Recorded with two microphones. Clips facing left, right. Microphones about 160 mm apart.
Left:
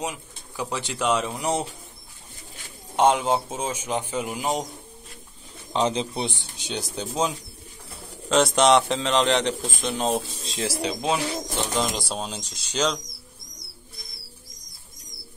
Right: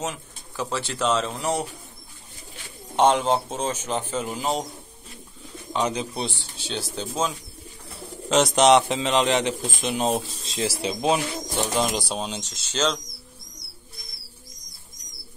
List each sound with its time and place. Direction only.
0.0 s speech: 15° left (ahead or behind)
3.0 s speech: 10° left (ahead or behind)
5.7 s speech: 30° left (ahead or behind)
8.3 s a man's voice: centre (ahead or behind)
10.7 s speech: 25° right (ahead or behind)
11.7 s speech: 10° right (ahead or behind)
12.1 s a man's voice: centre (ahead or behind)
12.4 s speech: 10° left (ahead or behind)